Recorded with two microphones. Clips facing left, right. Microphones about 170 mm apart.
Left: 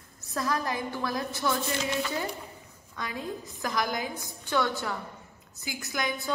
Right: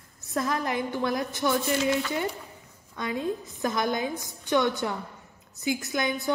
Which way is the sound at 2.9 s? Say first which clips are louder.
Right 6 dB; 20° right (ahead or behind).